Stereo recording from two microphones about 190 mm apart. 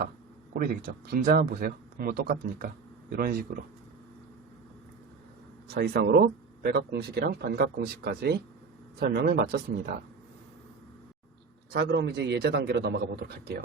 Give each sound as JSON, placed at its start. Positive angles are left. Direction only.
{"t": 0.5, "sound": "speech", "side_deg": -50}
{"t": 5.7, "sound": "speech", "side_deg": -55}
{"t": 11.7, "sound": "speech", "side_deg": -60}